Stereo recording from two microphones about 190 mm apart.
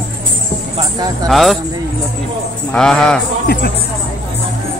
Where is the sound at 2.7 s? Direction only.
5° left (ahead or behind).